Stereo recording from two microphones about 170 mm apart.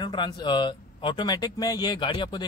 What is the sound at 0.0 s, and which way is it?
Speech, 25° left (ahead or behind).